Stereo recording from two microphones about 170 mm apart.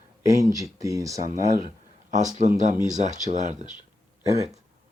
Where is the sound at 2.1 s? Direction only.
45° right (ahead or behind).